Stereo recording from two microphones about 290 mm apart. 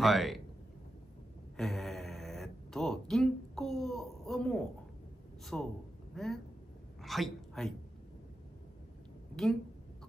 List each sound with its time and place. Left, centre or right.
0.0 s speech: centre
1.6 s a woman's voice: centre
9.3 s a woman's voice: centre